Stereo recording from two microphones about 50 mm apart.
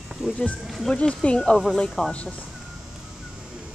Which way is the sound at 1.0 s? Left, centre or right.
Centre.